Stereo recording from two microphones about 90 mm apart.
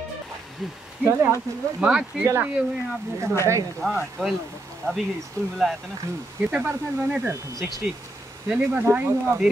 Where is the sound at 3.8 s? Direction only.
5° left (ahead or behind).